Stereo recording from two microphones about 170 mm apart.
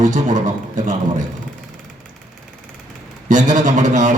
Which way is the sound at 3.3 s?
45° right (ahead or behind).